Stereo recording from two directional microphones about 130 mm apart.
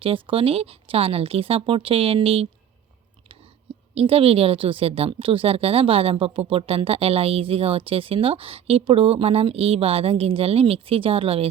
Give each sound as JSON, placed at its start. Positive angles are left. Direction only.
{"t": 0.0, "sound": "speech", "side_deg": -45}
{"t": 3.9, "sound": "speech", "side_deg": -50}